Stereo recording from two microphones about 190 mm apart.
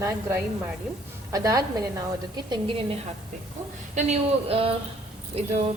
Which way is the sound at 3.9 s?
35° right (ahead or behind).